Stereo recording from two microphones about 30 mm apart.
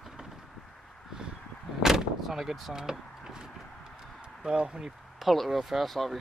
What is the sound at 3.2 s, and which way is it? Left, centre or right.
Wood, right.